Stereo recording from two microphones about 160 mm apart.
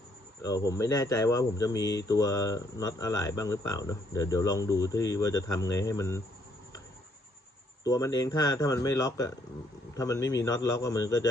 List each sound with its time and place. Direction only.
0.4 s speech: 20° left (ahead or behind)
7.9 s speech: 20° left (ahead or behind)